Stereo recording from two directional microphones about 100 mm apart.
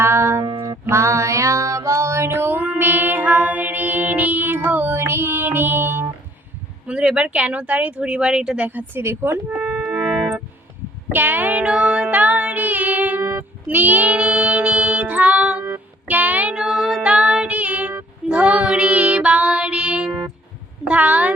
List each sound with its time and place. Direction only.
0.0 s music: 25° right (ahead or behind)
6.8 s speech: 10° right (ahead or behind); by 9.4 s 25° right (ahead or behind)
9.5 s music: 10° right (ahead or behind)
11.1 s music: 20° right (ahead or behind)
18.3 s child singing: 10° right (ahead or behind)
20.8 s speech: 15° right (ahead or behind)